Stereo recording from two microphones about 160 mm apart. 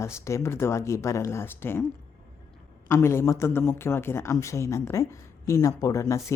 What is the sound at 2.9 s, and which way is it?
Speech, 15° left (ahead or behind).